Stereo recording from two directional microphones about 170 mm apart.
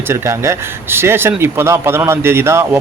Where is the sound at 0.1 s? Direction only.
15° right (ahead or behind).